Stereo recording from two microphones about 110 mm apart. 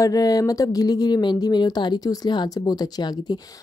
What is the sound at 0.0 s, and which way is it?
Speech, 35° left (ahead or behind).